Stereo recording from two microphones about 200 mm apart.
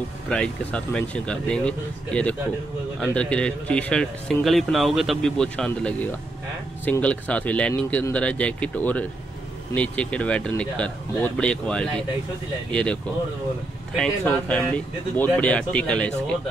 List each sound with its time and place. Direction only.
0.3 s a man's voice: 5° left (ahead or behind)